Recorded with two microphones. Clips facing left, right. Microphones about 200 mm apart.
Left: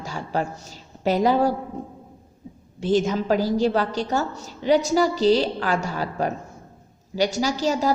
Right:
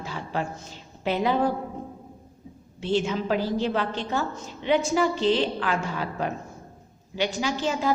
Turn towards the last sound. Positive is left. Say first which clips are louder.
# left 3 dB
turn(degrees=40)  # may be behind; listen again after turning